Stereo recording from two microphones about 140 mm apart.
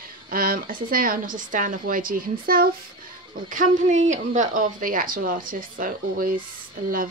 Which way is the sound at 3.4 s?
70° right (ahead or behind).